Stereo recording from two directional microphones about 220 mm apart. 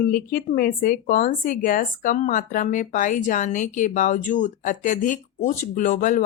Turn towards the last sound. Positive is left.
turn(degrees=35)  # may be behind; listen again after turning